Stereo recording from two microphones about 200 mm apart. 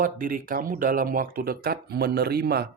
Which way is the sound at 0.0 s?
45° right (ahead or behind).